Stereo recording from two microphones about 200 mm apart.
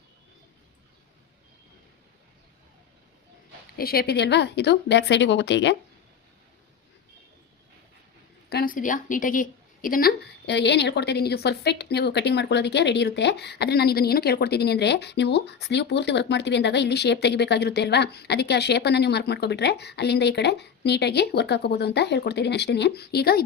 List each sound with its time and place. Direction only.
3.8 s a woman's voice: 50° left (ahead or behind)
8.4 s a woman's voice: 50° left (ahead or behind)